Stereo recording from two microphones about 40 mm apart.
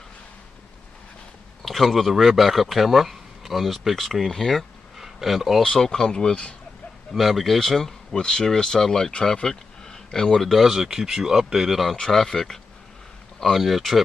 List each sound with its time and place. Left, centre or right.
1.6 s speech: centre
4.9 s a sound: centre
5.6 s speech: centre
7.2 s speech: centre
10.4 s speech: centre
12.0 s speech: centre
13.4 s speech: centre